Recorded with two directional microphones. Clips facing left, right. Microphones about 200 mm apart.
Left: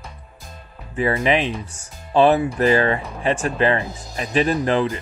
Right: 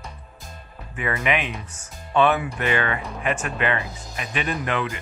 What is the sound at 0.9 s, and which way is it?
Speech, 30° left (ahead or behind).